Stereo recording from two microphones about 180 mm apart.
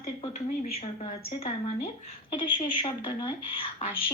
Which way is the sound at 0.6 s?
40° left (ahead or behind).